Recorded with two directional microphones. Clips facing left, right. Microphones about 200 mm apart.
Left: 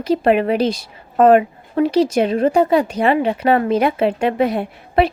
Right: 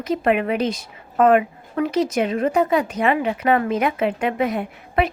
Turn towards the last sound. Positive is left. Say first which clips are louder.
# left 5 dB
turn(degrees=30)  # may be behind; listen again after turning